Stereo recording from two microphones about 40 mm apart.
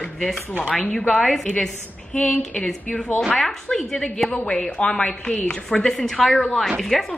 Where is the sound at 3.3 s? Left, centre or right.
Centre.